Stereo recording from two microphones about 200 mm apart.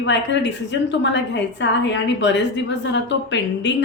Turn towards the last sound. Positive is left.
turn(degrees=65)  # may be behind; listen again after turning